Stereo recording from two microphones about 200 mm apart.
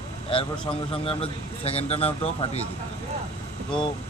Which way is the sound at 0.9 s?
30° left (ahead or behind).